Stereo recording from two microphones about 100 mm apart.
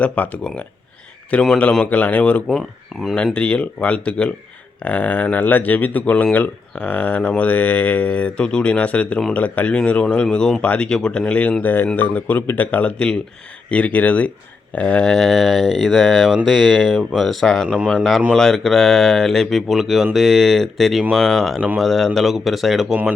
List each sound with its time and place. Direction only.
0.0 s speech: 15° left (ahead or behind)
2.5 s speech: centre (ahead or behind)
3.3 s speech: 10° left (ahead or behind)